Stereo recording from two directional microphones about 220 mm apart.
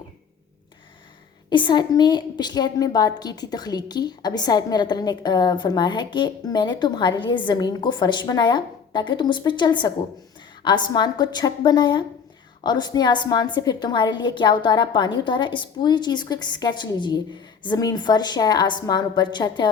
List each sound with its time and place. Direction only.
1.5 s a woman's voice: 20° left (ahead or behind)